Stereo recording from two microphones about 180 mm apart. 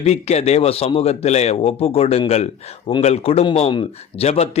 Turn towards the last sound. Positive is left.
turn(degrees=35)  # may be behind; listen again after turning